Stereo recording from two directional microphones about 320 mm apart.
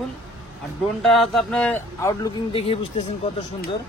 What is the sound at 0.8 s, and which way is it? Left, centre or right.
Speech, centre.